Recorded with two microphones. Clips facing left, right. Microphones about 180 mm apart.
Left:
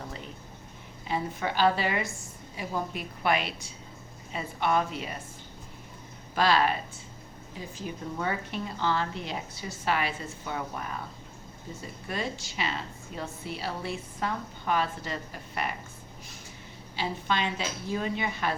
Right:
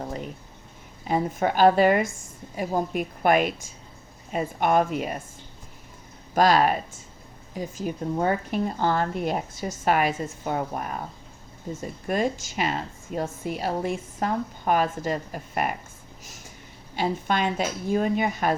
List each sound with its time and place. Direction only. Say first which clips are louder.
1.0 s a woman's voice: right 7 dB; 45° right (ahead or behind)
6.3 s a woman's voice: right 5 dB; 45° right (ahead or behind)
7.8 s a woman's voice: right 8 dB; 45° right (ahead or behind)
16.9 s a woman's voice: right 5 dB; 50° right (ahead or behind)